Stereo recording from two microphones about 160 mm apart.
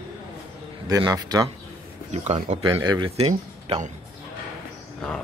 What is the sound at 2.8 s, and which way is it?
Speech, 30° right (ahead or behind).